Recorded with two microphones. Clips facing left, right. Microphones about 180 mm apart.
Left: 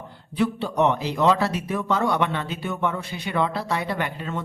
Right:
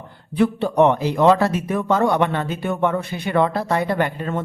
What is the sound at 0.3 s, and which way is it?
Speech, 55° right (ahead or behind).